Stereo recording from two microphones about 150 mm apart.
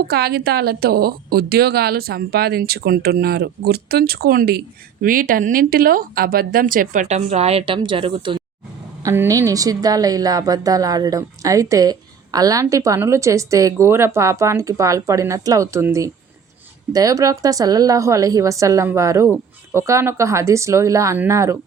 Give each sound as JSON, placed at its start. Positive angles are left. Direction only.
{"t": 0.1, "sound": "a woman's voice", "side_deg": -90}
{"t": 5.0, "sound": "speech", "side_deg": -70}
{"t": 9.0, "sound": "a woman's voice", "side_deg": -20}